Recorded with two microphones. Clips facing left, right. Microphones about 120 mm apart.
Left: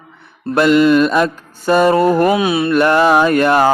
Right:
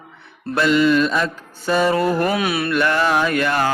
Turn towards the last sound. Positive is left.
turn(degrees=45)  # may be behind; listen again after turning